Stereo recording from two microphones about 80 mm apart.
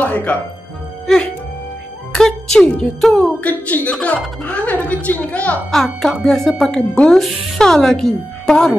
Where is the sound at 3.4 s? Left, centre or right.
Left.